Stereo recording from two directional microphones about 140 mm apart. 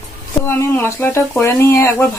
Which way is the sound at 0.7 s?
15° left (ahead or behind).